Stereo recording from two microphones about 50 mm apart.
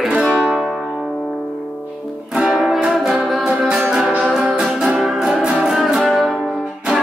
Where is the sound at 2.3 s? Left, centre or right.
Right.